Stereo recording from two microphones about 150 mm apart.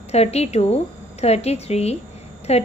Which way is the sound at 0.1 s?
45° left (ahead or behind).